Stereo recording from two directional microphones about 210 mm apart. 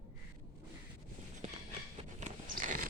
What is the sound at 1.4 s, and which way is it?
Train, 35° right (ahead or behind).